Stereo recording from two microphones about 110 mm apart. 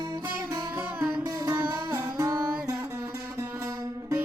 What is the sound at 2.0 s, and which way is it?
Music, 30° right (ahead or behind).